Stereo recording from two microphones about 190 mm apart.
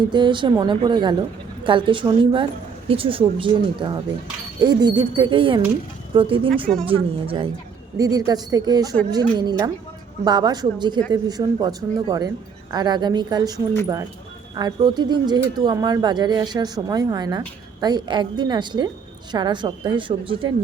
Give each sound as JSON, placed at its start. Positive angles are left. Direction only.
{"t": 0.0, "sound": "speech", "side_deg": -25}
{"t": 7.9, "sound": "speech", "side_deg": -20}